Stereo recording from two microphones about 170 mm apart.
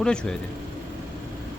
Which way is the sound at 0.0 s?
5° left (ahead or behind).